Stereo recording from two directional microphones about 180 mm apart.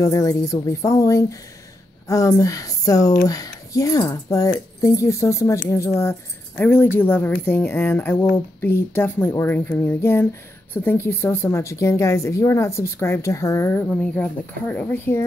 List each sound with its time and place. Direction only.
0.0 s a woman's voice: 15° left (ahead or behind)